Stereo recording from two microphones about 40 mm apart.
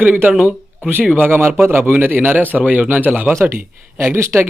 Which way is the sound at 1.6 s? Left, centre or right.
Right.